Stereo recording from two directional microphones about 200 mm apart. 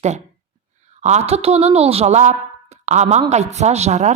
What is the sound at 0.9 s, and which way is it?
A woman's voice, 35° right (ahead or behind).